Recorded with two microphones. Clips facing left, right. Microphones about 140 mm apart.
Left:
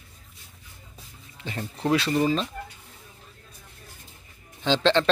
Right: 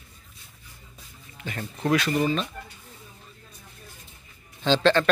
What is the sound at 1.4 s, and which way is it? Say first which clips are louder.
Speech: even; 30° left (ahead or behind).